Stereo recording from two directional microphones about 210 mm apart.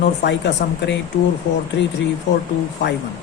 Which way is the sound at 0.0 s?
55° left (ahead or behind).